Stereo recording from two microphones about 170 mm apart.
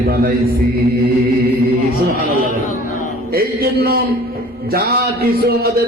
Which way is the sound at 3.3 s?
65° right (ahead or behind).